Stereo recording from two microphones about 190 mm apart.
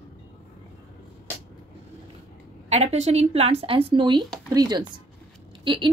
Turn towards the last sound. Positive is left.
turn(degrees=-25)  # may be behind; listen again after turning